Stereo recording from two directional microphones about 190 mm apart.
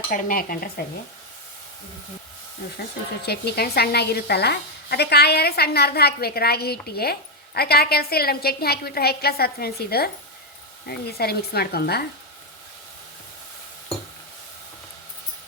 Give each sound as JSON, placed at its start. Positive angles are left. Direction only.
{"t": 0.1, "sound": "dishes", "side_deg": 50}
{"t": 3.2, "sound": "a woman's voice", "side_deg": 55}